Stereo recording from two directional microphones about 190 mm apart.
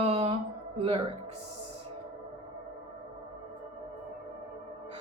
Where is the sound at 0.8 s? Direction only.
30° right (ahead or behind).